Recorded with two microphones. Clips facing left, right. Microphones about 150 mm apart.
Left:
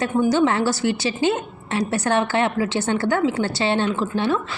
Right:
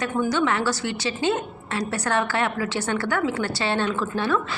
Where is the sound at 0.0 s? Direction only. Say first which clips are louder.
Left 5 dB; 30° left (ahead or behind).